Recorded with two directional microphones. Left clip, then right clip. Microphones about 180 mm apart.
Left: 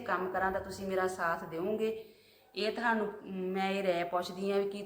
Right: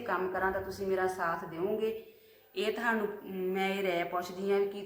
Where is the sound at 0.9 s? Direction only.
20° left (ahead or behind).